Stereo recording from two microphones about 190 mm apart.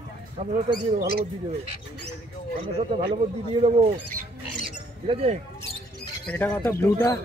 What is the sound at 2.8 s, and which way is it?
Speech, 30° right (ahead or behind).